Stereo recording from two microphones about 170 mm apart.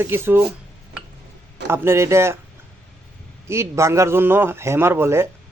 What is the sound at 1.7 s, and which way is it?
Speech, 15° right (ahead or behind).